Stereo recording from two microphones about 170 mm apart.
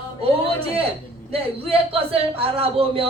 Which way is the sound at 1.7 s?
35° right (ahead or behind).